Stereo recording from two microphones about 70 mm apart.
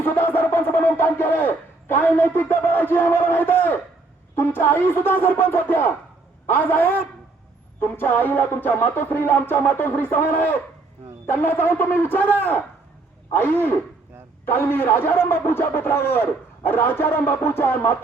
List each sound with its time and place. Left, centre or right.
0.0 s a man's voice: left
13.3 s a man's voice: left